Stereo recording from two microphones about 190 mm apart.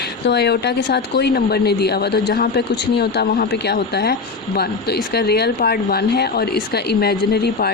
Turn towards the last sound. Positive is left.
turn(degrees=55)  # may be behind; listen again after turning